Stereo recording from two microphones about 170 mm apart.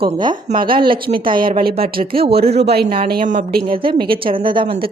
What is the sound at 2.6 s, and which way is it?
Speech, 70° right (ahead or behind).